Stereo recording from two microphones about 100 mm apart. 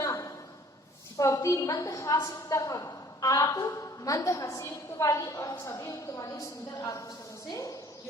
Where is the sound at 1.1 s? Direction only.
35° left (ahead or behind).